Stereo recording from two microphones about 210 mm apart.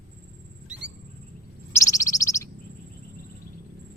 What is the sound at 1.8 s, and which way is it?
Bird, 15° left (ahead or behind).